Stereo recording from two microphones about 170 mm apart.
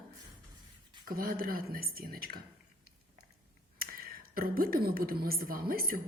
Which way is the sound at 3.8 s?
60° right (ahead or behind).